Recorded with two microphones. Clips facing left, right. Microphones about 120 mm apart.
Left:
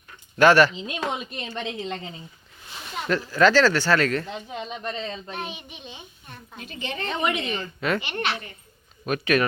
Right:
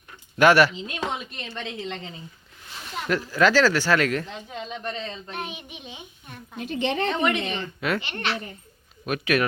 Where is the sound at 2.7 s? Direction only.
5° left (ahead or behind).